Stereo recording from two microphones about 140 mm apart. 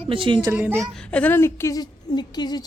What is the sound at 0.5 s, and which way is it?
Speech, 15° right (ahead or behind).